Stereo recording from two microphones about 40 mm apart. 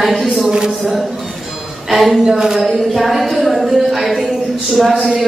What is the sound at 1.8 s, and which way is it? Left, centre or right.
Speech, centre.